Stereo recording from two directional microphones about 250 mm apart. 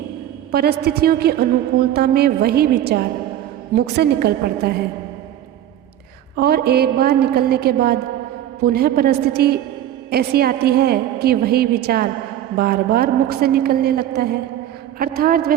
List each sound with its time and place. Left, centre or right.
0.5 s a woman's voice: right
6.3 s a woman's voice: right